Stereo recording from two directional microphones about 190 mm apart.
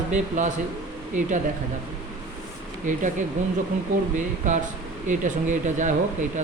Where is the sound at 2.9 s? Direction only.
40° right (ahead or behind).